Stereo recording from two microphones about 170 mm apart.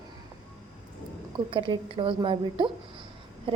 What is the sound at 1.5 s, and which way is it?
A woman's voice, 30° right (ahead or behind).